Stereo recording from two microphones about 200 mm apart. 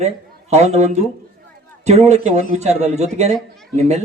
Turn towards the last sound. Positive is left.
turn(degrees=-35)  # may be behind; listen again after turning